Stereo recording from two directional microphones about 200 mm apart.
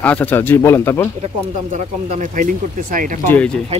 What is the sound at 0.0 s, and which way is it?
Speech, 10° left (ahead or behind).